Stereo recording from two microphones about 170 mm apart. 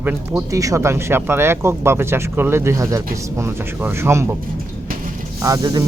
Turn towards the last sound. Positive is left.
turn(degrees=-20)  # may be behind; listen again after turning